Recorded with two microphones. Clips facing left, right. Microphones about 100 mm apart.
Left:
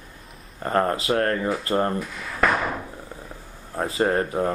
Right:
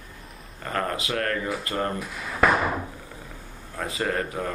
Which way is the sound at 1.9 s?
10° right (ahead or behind).